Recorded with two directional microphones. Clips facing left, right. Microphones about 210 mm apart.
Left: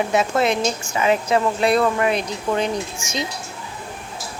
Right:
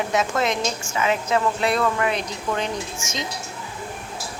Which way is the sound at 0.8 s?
35° left (ahead or behind).